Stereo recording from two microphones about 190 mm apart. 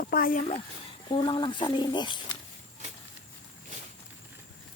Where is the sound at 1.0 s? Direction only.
25° left (ahead or behind).